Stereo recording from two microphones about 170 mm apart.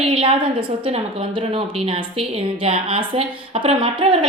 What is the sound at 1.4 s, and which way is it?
A woman's voice, 35° right (ahead or behind).